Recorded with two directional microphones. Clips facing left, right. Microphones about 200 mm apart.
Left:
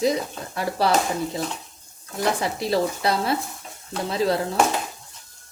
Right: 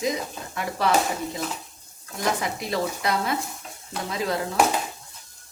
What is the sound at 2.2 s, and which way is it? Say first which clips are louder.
Speech: left 3 dB; 30° left (ahead or behind).